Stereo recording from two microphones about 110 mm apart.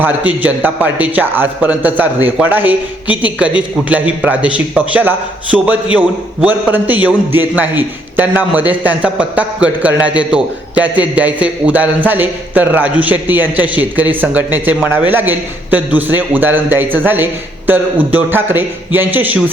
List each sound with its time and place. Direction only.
0.0 s a man's voice: 15° right (ahead or behind)